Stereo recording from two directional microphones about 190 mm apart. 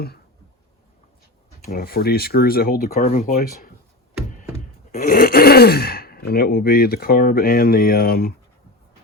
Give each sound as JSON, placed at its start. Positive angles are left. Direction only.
{"t": 1.7, "sound": "speech", "side_deg": 55}
{"t": 4.4, "sound": "gasp", "side_deg": 45}